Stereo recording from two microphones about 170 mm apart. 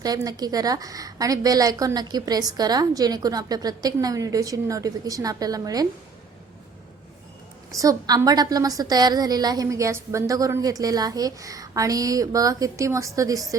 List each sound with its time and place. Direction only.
0.0 s a woman's voice: 20° right (ahead or behind)
7.8 s a woman's voice: 20° right (ahead or behind)